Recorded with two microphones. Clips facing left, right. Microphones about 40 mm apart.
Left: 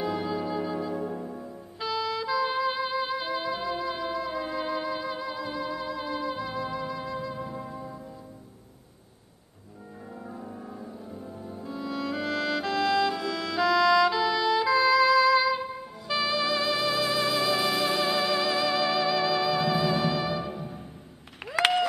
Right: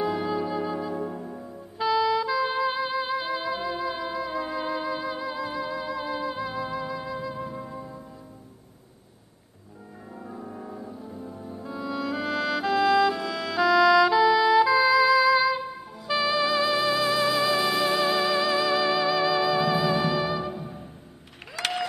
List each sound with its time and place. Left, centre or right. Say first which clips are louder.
0.0 s music: right 3 dB; centre
7.5 s music: right 1 dB; right
11.5 s music: right 2 dB; centre
21.5 s applause: left 6 dB; left